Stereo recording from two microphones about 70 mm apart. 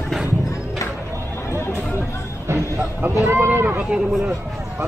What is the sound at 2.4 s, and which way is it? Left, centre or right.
Music, right.